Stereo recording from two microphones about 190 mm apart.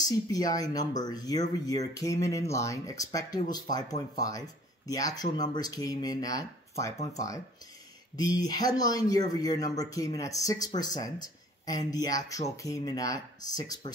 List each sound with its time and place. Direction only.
0.0 s speech: 20° left (ahead or behind)
8.2 s speech: 20° left (ahead or behind)